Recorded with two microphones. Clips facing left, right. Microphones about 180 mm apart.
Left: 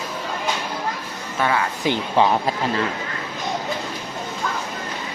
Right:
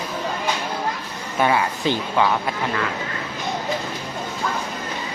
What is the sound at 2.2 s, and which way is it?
Speech, 30° left (ahead or behind).